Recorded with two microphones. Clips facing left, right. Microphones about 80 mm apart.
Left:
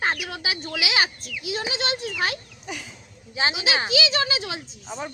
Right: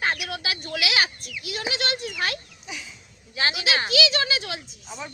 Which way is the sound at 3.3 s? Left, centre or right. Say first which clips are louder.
Left 1 dB; left.